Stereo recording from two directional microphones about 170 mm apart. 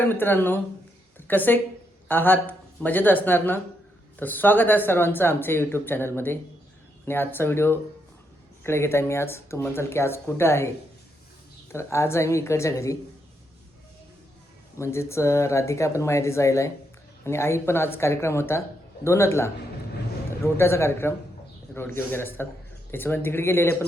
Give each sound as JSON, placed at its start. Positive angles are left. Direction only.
{"t": 0.0, "sound": "speech", "side_deg": 10}
{"t": 11.7, "sound": "speech", "side_deg": 15}
{"t": 14.8, "sound": "speech", "side_deg": 15}